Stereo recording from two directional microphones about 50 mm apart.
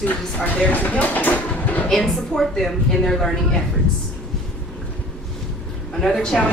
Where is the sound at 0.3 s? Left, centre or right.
Left.